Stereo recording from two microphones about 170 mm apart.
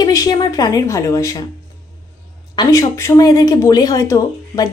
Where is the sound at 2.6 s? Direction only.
20° left (ahead or behind).